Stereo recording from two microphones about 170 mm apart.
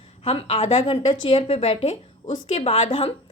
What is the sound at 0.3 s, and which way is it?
A woman's voice, 35° left (ahead or behind).